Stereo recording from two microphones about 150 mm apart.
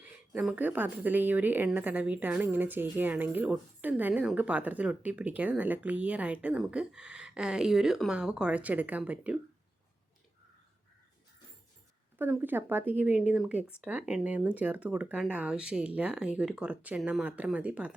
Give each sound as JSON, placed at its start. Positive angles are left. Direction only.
{"t": 0.0, "sound": "speech", "side_deg": -10}
{"t": 12.2, "sound": "speech", "side_deg": -10}